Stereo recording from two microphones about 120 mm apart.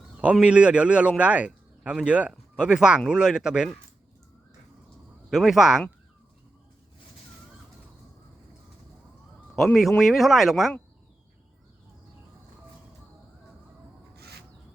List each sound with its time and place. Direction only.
0.2 s a man's voice: 10° right (ahead or behind)
5.3 s speech: 5° right (ahead or behind)
10.0 s speech: centre (ahead or behind)